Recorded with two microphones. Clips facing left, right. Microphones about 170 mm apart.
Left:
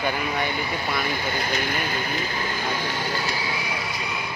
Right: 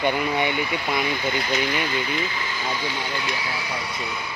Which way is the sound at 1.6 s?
50° left (ahead or behind).